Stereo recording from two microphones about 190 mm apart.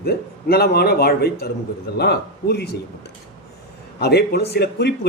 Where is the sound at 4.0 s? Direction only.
60° left (ahead or behind).